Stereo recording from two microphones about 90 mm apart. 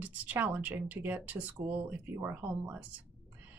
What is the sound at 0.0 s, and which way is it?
Speech, 15° right (ahead or behind).